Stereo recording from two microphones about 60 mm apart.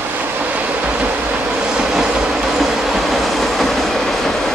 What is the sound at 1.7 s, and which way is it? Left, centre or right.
Train, centre.